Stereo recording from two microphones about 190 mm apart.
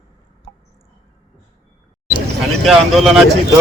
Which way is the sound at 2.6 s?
Centre (ahead or behind).